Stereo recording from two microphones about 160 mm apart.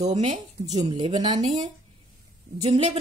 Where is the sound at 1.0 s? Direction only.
45° right (ahead or behind).